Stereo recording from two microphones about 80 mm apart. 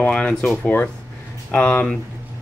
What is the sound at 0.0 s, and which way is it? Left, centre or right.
Speech, centre.